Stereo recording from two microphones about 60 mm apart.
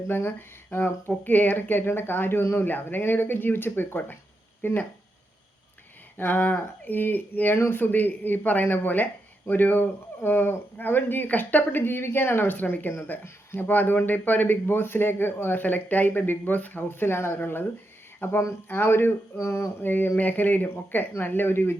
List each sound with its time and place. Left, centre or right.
0.1 s speech: left
6.1 s speech: left
19.8 s speech: left